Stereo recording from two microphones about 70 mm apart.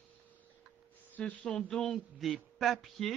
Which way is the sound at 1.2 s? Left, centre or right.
Left.